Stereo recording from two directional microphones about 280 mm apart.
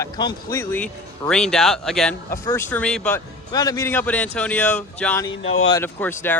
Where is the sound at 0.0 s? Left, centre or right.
Centre.